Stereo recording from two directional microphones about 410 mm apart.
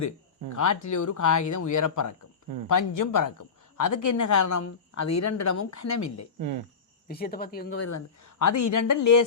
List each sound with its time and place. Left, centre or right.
0.5 s speech: left
7.1 s speech: left
7.8 s speech: left